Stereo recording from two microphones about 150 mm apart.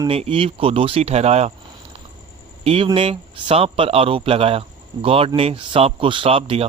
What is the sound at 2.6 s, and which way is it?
Speech, 40° right (ahead or behind).